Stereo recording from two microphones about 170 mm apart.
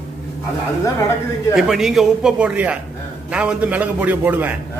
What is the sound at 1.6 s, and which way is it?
A man's voice, centre (ahead or behind).